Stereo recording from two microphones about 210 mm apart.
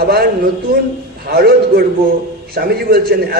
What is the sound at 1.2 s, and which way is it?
A man's voice, 50° right (ahead or behind).